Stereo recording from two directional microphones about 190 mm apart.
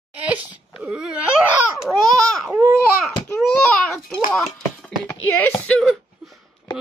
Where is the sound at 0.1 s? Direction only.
10° right (ahead or behind).